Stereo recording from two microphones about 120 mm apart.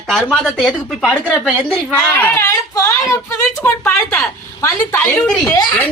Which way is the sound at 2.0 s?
20° left (ahead or behind).